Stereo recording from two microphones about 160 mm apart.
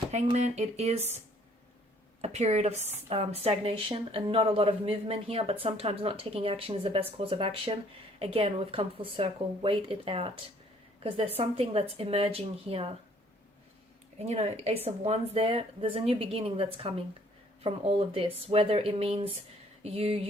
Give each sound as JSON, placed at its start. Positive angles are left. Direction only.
{"t": 0.1, "sound": "speech", "side_deg": -45}
{"t": 2.2, "sound": "speech", "side_deg": -45}
{"t": 14.2, "sound": "speech", "side_deg": -40}